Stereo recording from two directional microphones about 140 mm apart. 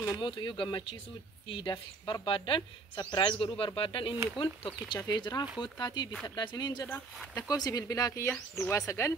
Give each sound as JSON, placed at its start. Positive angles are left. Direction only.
{"t": 0.2, "sound": "speech", "side_deg": 35}